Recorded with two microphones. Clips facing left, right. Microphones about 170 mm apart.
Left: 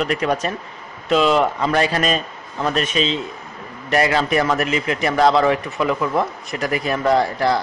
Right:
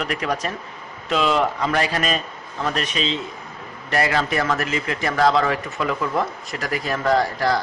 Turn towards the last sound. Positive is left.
turn(degrees=15)  # may be behind; listen again after turning